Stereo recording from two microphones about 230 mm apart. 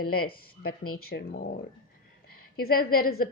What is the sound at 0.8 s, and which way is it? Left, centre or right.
Speech, left.